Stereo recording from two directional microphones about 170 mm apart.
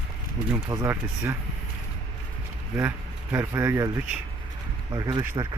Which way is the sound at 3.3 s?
15° right (ahead or behind).